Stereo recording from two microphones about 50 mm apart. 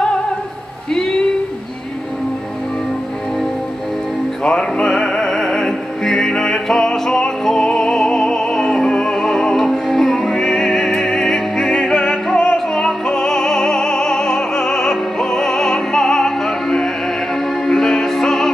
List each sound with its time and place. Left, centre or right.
4.5 s music: centre